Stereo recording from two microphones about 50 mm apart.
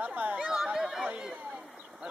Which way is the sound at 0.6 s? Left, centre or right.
Centre.